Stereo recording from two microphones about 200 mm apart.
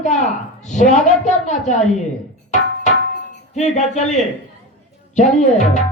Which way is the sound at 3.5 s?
35° left (ahead or behind).